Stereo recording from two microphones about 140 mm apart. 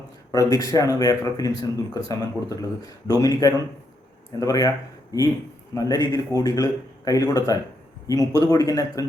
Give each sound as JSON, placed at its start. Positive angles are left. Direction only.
{"t": 0.3, "sound": "speech", "side_deg": 25}
{"t": 5.7, "sound": "speech", "side_deg": 25}